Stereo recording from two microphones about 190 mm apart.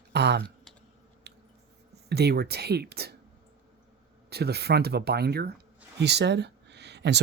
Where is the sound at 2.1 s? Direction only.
60° right (ahead or behind).